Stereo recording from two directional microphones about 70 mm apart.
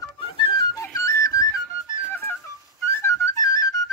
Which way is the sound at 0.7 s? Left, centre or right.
Left.